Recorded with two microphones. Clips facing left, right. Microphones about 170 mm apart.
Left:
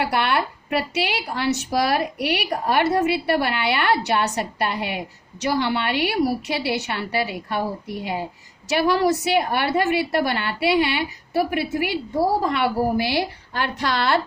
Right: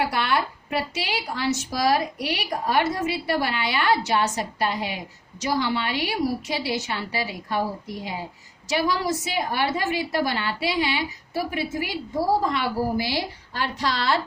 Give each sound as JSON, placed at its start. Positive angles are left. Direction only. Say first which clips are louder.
{"t": 0.0, "sound": "a woman's voice", "louder": "left 2 dB", "side_deg": 65}